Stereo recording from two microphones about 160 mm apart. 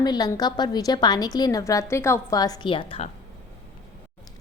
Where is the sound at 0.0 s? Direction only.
25° left (ahead or behind).